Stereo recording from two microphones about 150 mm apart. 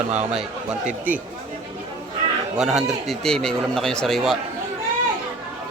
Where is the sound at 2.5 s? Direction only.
5° right (ahead or behind).